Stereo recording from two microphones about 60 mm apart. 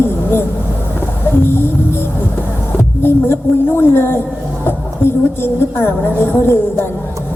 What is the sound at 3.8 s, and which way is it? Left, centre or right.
A woman's voice, left.